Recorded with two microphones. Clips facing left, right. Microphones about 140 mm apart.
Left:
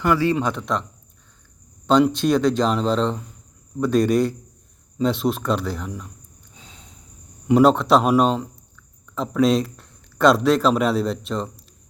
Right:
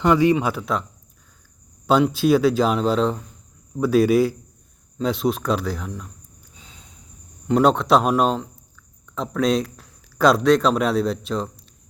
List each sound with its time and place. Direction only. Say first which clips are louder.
0.0 s speech: right 3 dB; 20° right (ahead or behind)
0.3 s speech: even; 5° right (ahead or behind)
1.9 s speech: even; 5° right (ahead or behind)
7.4 s speech: left 2 dB; 5° left (ahead or behind)